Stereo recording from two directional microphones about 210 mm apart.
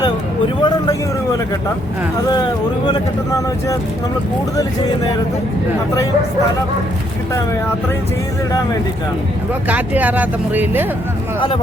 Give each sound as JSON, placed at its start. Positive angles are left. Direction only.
{"t": 0.6, "sound": "speech", "side_deg": 15}
{"t": 9.6, "sound": "speech", "side_deg": -5}
{"t": 11.3, "sound": "speech", "side_deg": 25}